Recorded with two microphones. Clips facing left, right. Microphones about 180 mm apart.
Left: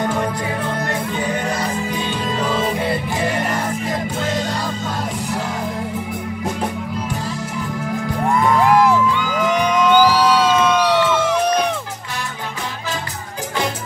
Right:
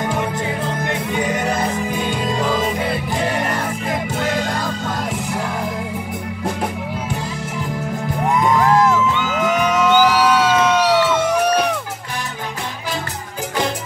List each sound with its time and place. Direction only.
8.3 s music: 20° right (ahead or behind)
8.5 s music: 15° left (ahead or behind)
9.8 s music: 10° right (ahead or behind)